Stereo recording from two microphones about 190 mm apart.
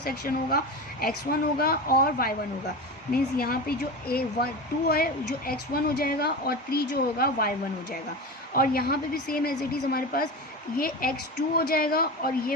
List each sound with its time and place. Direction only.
0.0 s a woman's voice: 55° left (ahead or behind)
8.5 s a woman's voice: 50° left (ahead or behind)